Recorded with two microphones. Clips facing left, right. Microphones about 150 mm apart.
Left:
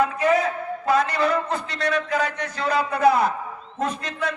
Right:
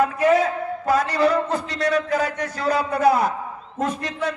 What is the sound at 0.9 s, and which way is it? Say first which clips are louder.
A man's voice: right 2 dB; 40° right (ahead or behind).